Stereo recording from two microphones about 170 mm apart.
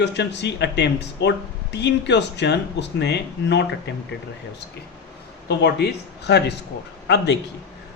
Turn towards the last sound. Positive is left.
turn(degrees=85)